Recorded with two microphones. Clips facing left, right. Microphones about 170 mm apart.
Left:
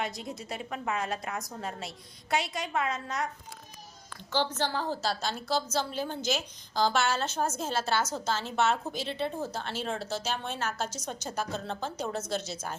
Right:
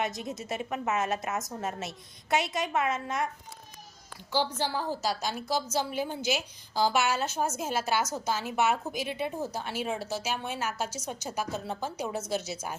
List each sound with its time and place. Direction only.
0.0 s a woman's voice: 20° right (ahead or behind)
4.3 s a woman's voice: 10° right (ahead or behind)